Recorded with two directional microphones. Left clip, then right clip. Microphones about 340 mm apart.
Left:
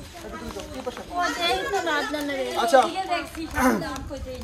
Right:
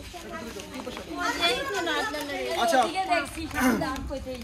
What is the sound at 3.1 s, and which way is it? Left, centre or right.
Speech, centre.